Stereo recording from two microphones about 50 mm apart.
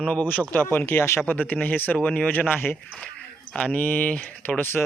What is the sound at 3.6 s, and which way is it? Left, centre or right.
Speech, left.